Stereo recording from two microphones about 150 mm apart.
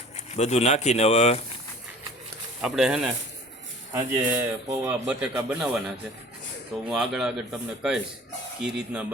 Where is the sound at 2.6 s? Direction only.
5° right (ahead or behind).